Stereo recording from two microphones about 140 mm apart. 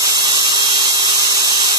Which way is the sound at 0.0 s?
30° right (ahead or behind).